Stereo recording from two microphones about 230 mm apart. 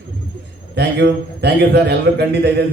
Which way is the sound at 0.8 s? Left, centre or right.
Right.